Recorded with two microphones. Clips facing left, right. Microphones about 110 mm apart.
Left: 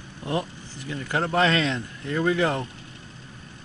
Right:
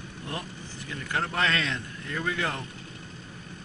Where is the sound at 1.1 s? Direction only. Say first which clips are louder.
Left 6 dB; 25° left (ahead or behind).